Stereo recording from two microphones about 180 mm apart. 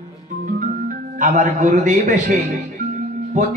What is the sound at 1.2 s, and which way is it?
A man's voice, 45° right (ahead or behind).